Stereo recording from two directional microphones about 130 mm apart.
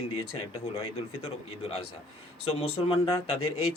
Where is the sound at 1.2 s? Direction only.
50° left (ahead or behind).